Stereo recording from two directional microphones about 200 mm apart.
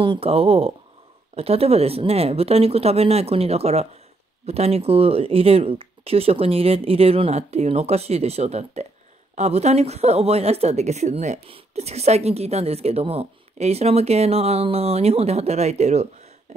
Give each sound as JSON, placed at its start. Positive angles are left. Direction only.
{"t": 0.0, "sound": "speech", "side_deg": -25}